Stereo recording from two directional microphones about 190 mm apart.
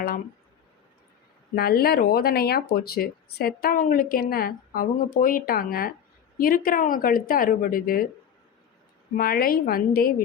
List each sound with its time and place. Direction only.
1.5 s speech: 55° left (ahead or behind)
9.1 s speech: 50° left (ahead or behind)